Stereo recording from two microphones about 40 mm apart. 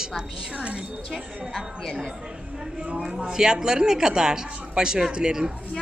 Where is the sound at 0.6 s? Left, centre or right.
Right.